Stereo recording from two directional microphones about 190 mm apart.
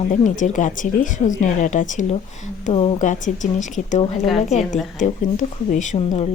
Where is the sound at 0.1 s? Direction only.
40° left (ahead or behind).